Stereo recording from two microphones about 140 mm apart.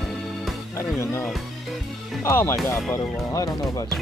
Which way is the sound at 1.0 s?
20° left (ahead or behind).